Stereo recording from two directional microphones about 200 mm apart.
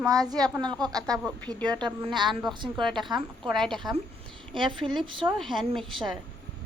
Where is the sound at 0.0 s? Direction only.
20° right (ahead or behind).